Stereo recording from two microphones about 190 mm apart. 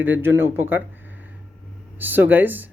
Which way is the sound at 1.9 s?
10° right (ahead or behind).